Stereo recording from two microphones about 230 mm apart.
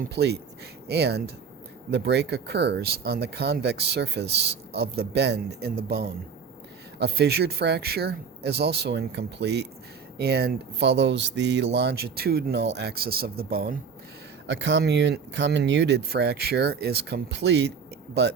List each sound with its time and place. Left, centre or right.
0.0 s speech: right
7.0 s speech: right